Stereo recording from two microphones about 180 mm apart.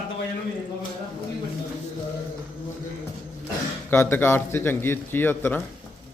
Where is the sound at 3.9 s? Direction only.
10° left (ahead or behind).